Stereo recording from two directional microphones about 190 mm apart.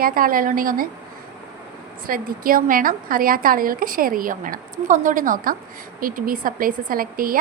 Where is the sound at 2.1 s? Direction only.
50° right (ahead or behind).